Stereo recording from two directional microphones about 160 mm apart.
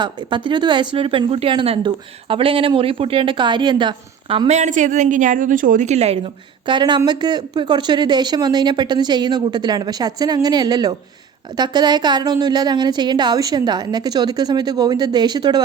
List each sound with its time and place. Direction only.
0.0 s speech: 30° right (ahead or behind)
6.7 s speech: 30° right (ahead or behind)